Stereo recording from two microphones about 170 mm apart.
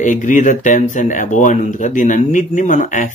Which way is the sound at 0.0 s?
50° left (ahead or behind).